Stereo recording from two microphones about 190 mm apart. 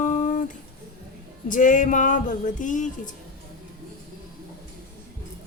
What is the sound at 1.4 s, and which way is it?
Music, 45° left (ahead or behind).